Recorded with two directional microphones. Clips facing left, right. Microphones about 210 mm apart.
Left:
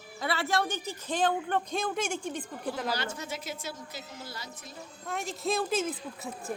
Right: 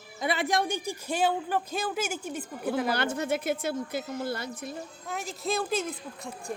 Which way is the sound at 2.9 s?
55° right (ahead or behind).